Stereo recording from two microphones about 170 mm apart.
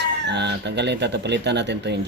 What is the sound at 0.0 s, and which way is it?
Speech, 85° right.